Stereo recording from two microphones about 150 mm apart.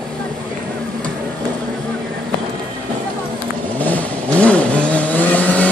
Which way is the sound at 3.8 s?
10° left (ahead or behind).